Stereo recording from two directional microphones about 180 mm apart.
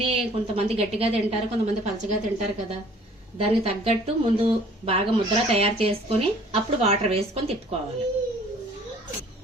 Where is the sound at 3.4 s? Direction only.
35° right (ahead or behind).